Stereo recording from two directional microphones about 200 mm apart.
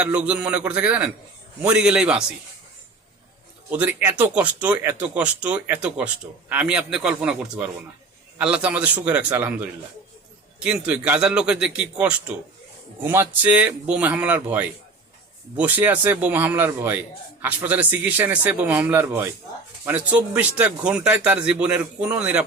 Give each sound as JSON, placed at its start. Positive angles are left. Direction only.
{"t": 0.0, "sound": "a man's voice", "side_deg": -5}
{"t": 3.7, "sound": "a man's voice", "side_deg": -10}